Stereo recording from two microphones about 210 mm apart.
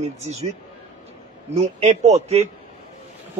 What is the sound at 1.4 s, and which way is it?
A man's voice, 30° right (ahead or behind).